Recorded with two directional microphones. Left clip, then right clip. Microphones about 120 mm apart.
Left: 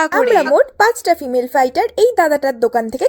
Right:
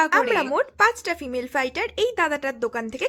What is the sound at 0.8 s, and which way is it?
A woman's voice, 5° left (ahead or behind).